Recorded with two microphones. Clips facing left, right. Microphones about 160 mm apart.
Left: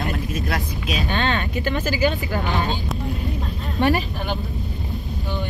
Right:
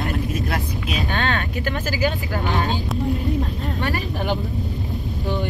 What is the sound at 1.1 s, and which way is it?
Speech, 5° right (ahead or behind).